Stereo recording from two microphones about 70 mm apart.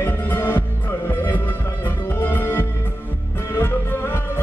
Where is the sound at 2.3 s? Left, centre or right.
Left.